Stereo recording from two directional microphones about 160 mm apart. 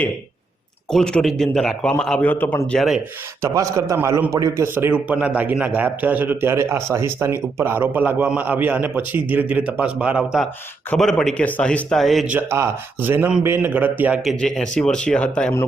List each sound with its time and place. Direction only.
0.9 s a man's voice: 5° left (ahead or behind)
3.4 s a man's voice: 20° right (ahead or behind); by 12.2 s centre (ahead or behind)
12.3 s a man's voice: 15° right (ahead or behind)
14.3 s a man's voice: centre (ahead or behind)